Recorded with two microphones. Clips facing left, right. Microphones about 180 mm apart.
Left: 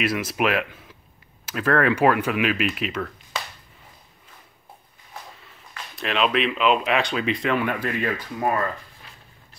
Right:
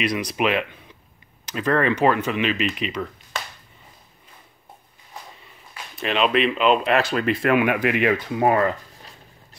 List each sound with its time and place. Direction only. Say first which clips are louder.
0.0 s speech: right 1 dB; 5° left (ahead or behind)
5.9 s speech: right 2 dB; centre (ahead or behind); by 8.7 s 20° right (ahead or behind)